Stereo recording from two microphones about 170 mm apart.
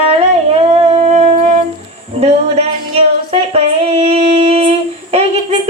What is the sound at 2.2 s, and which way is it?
Music, 40° right (ahead or behind).